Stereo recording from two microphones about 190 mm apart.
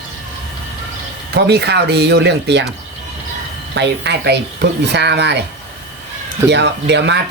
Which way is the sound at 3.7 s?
65° right (ahead or behind).